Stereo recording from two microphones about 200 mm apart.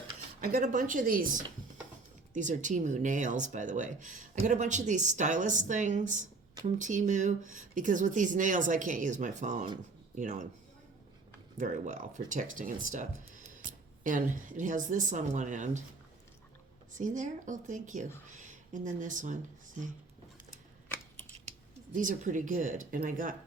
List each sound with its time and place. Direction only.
0.4 s speech: 45° right (ahead or behind)
11.5 s speech: 40° right (ahead or behind)
16.9 s speech: 40° right (ahead or behind)
21.9 s speech: 40° right (ahead or behind)